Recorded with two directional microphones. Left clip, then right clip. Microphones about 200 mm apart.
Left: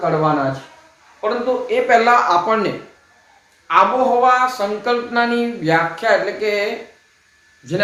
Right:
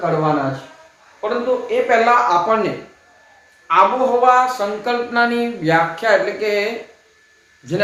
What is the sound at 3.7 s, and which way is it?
Speech, 35° left (ahead or behind).